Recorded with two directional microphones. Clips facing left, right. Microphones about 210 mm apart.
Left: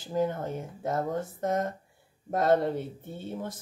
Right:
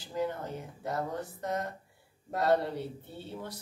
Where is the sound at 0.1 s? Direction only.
50° left (ahead or behind).